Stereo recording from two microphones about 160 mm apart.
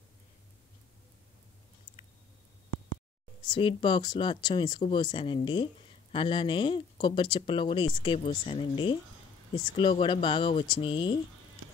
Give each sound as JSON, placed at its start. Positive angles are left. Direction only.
{"t": 3.4, "sound": "speech", "side_deg": 30}